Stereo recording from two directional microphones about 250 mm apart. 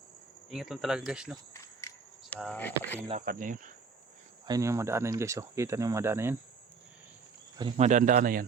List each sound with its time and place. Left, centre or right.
0.5 s speech: centre
1.8 s a sound: centre
2.3 s speech: centre
3.1 s speech: right
4.4 s speech: centre
7.6 s speech: right